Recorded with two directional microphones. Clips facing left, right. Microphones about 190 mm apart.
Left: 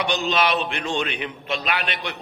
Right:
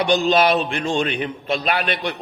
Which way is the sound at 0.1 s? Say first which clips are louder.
Right 7 dB; 35° right (ahead or behind).